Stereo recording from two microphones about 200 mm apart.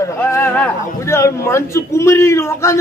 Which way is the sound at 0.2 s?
10° left (ahead or behind).